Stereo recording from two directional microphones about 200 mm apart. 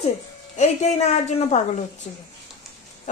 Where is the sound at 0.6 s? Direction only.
35° left (ahead or behind).